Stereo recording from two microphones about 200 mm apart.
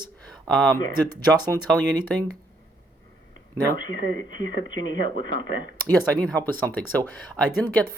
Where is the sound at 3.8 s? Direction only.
70° left (ahead or behind).